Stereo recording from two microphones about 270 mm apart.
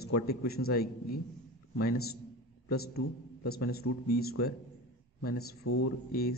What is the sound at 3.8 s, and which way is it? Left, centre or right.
Speech, left.